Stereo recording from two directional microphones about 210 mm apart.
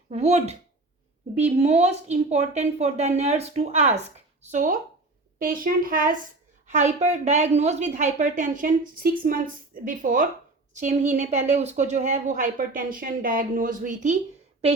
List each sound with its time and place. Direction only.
0.1 s a woman's voice: 30° right (ahead or behind)